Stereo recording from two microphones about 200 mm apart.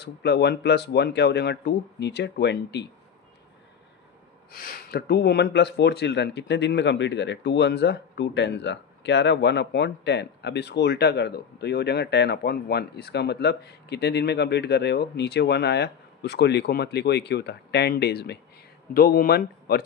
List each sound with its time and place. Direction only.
0.0 s speech: 55° left (ahead or behind)
4.5 s speech: 50° left (ahead or behind)